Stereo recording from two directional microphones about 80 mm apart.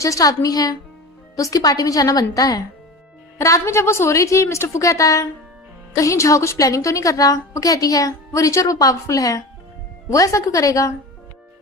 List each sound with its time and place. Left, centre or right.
0.0 s a woman's voice: left
3.3 s a woman's voice: left